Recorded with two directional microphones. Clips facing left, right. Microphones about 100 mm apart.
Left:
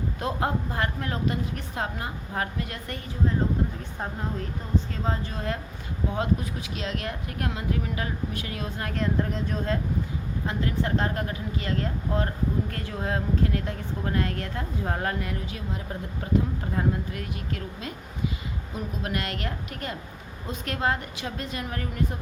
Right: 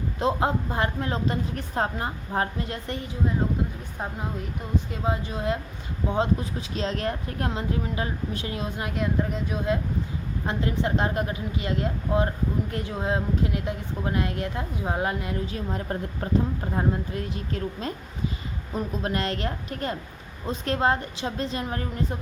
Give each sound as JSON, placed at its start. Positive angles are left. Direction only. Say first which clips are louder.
{"t": 0.2, "sound": "a woman's voice", "louder": "right 4 dB", "side_deg": -25}
{"t": 4.9, "sound": "a woman's voice", "louder": "right 2 dB", "side_deg": -15}
{"t": 9.0, "sound": "speech", "louder": "even", "side_deg": -5}
{"t": 10.4, "sound": "a woman's voice", "louder": "right 2 dB", "side_deg": -25}
{"t": 15.4, "sound": "a woman's voice", "louder": "right 4 dB", "side_deg": -35}
{"t": 16.7, "sound": "a woman's voice", "louder": "right 1 dB", "side_deg": -25}